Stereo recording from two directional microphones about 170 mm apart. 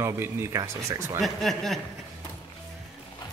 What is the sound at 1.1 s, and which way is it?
Speech, centre (ahead or behind).